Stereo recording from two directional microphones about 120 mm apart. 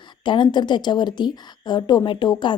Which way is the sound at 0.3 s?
40° left (ahead or behind).